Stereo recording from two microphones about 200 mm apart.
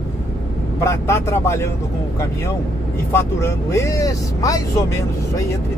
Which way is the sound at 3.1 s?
15° left (ahead or behind).